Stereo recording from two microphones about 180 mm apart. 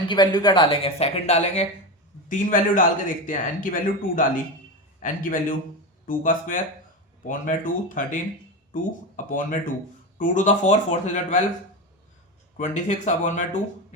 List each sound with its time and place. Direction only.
0.1 s speech: 25° left (ahead or behind)
2.3 s a man's voice: 45° left (ahead or behind)
12.5 s a man's voice: 40° left (ahead or behind)